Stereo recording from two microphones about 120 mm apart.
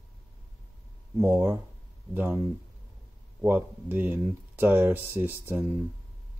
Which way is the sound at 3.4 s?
15° right (ahead or behind).